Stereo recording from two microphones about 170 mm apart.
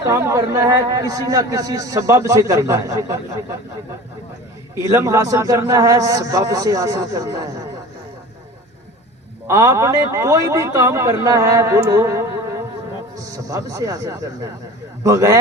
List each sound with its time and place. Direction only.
0.1 s a man's voice: 15° right (ahead or behind)
4.7 s a man's voice: 15° right (ahead or behind)
9.5 s a man's voice: 20° right (ahead or behind)